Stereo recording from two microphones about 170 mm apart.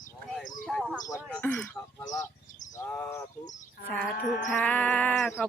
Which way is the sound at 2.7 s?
15° left (ahead or behind).